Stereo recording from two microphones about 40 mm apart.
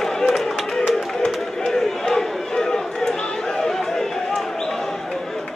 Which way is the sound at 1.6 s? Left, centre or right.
Centre.